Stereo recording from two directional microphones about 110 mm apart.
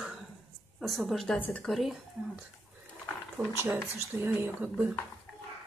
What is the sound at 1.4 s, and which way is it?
Speech, 15° left (ahead or behind).